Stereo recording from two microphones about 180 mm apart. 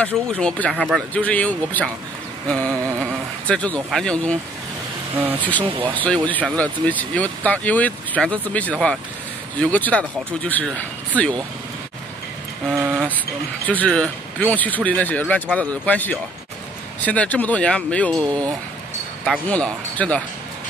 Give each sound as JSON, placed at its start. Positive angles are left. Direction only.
{"t": 0.0, "sound": "speech", "side_deg": 5}
{"t": 2.4, "sound": "carnatic music", "side_deg": 5}
{"t": 3.0, "sound": "speech", "side_deg": 5}
{"t": 5.6, "sound": "speech", "side_deg": -30}
{"t": 5.9, "sound": "speech", "side_deg": 5}
{"t": 12.9, "sound": "a sound", "side_deg": 5}
{"t": 13.7, "sound": "speech", "side_deg": 5}